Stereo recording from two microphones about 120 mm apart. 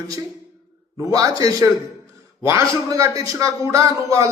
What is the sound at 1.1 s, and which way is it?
A man's voice, 30° right (ahead or behind).